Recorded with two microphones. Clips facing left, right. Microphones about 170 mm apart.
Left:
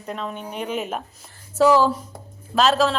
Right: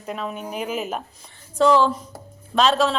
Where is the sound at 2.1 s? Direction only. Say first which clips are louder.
Even; centre (ahead or behind).